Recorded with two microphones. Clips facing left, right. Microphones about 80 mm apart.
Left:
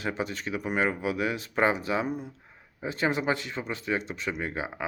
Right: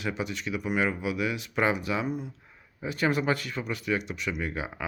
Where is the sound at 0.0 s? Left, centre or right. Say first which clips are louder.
Left 1 dB; left.